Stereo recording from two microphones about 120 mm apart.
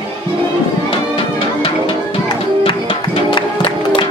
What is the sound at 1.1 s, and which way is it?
Music, 45° left (ahead or behind).